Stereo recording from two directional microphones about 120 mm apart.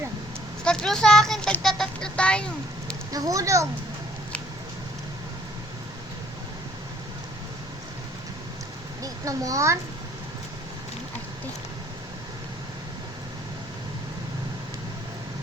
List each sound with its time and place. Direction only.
0.6 s a child's voice: 5° left (ahead or behind)
3.1 s speech: 30° right (ahead or behind)
9.0 s a child's voice: 30° right (ahead or behind)